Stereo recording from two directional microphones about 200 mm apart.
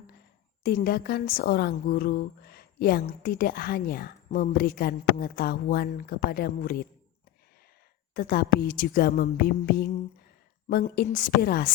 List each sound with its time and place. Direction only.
0.6 s a woman's voice: 50° left (ahead or behind)
8.1 s a woman's voice: 45° left (ahead or behind)